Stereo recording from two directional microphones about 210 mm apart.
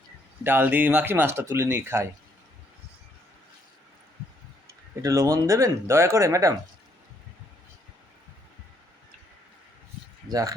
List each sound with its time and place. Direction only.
0.4 s speech: 10° right (ahead or behind)
5.0 s speech: 15° right (ahead or behind)
10.2 s speech: 15° right (ahead or behind)